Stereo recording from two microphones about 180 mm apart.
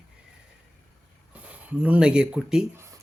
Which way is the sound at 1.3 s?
10° right (ahead or behind).